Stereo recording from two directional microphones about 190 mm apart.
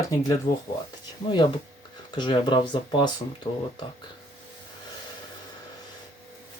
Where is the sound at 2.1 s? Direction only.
25° left (ahead or behind).